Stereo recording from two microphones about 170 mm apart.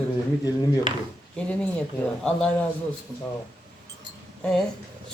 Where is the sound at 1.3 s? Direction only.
5° left (ahead or behind).